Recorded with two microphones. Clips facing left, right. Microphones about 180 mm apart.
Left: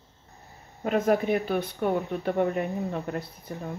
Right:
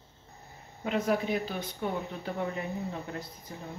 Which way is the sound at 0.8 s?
50° left (ahead or behind).